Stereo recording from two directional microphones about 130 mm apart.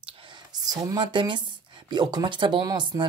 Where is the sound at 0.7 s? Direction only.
35° right (ahead or behind).